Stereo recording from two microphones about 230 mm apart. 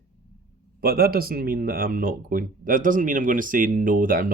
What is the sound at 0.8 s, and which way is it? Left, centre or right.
Speech, right.